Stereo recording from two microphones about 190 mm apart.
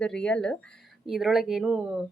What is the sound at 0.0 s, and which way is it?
Speech, 5° left (ahead or behind).